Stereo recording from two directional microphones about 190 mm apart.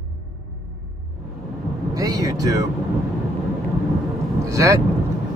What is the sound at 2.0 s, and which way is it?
Vehicle, 20° right (ahead or behind).